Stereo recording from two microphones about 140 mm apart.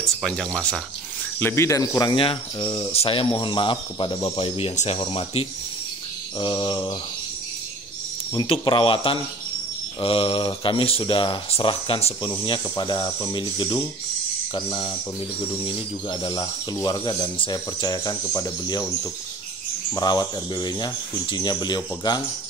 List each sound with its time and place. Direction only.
0.0 s speech: centre (ahead or behind)
1.4 s speech: 20° left (ahead or behind)
2.1 s speech: 40° left (ahead or behind)
8.5 s speech: 40° left (ahead or behind)
20.0 s speech: 30° left (ahead or behind)